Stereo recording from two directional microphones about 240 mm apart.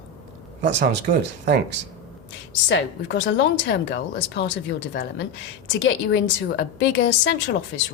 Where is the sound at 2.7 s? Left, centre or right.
Left.